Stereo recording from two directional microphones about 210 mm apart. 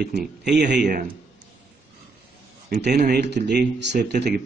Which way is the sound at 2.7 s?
50° right (ahead or behind).